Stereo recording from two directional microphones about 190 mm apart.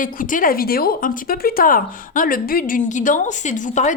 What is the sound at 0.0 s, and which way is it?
A woman's voice, 45° left (ahead or behind).